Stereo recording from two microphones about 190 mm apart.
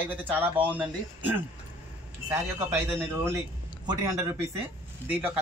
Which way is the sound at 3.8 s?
20° right (ahead or behind).